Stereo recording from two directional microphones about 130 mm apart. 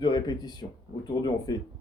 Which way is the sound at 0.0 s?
35° left (ahead or behind).